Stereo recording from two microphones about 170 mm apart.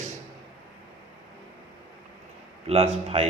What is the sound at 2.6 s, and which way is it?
Speech, 35° right (ahead or behind).